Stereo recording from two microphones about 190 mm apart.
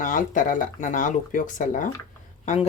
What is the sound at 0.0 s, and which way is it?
Speech, 45° left (ahead or behind).